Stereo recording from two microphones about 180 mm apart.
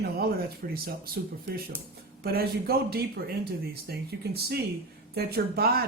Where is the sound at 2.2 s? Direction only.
60° right (ahead or behind).